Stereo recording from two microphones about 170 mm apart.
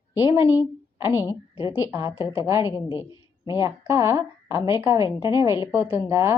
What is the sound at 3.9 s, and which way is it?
A woman's voice, 15° right (ahead or behind).